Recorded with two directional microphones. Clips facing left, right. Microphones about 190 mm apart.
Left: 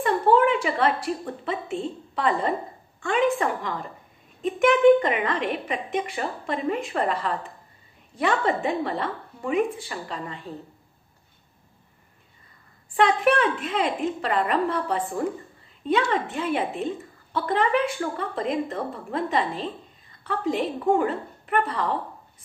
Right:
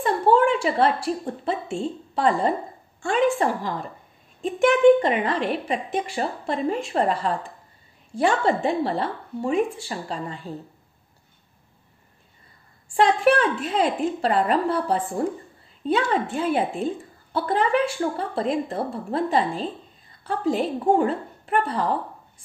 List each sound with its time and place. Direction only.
0.0 s a woman's voice: 30° right (ahead or behind)
5.0 s a woman's voice: 35° right (ahead or behind)
12.8 s a woman's voice: 30° right (ahead or behind)